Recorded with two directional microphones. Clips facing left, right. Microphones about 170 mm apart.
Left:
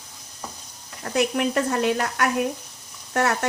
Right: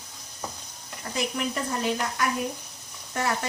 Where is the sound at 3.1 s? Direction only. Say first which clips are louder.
Left 6 dB; 65° left (ahead or behind).